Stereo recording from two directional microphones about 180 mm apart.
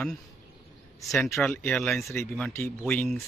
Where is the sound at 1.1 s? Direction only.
Centre (ahead or behind).